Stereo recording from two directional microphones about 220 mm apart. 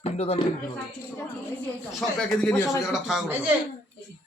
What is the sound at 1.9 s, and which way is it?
A woman's voice, centre (ahead or behind).